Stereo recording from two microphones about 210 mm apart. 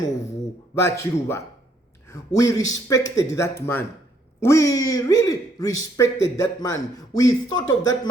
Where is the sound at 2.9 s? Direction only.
60° left (ahead or behind).